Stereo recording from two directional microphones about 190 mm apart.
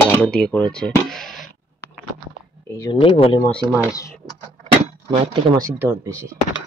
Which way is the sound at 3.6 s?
10° right (ahead or behind).